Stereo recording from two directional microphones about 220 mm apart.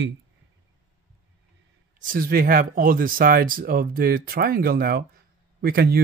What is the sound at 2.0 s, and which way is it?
Speech, 40° right (ahead or behind).